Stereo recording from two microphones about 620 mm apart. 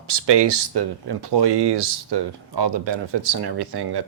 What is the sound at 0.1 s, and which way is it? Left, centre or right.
Speech, right.